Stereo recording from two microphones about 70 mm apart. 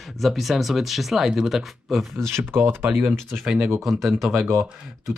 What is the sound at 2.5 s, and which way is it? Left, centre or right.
Speech, right.